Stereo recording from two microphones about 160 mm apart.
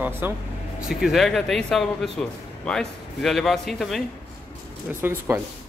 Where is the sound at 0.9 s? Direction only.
Centre (ahead or behind).